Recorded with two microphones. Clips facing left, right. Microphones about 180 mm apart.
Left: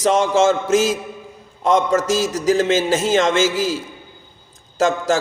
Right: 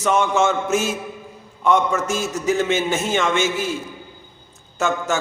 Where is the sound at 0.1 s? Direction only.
90° left.